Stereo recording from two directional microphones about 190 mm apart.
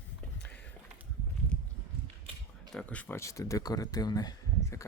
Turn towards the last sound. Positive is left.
turn(degrees=20)  # may be behind; listen again after turning